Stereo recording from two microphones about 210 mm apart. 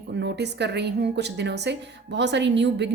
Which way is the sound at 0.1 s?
55° right (ahead or behind).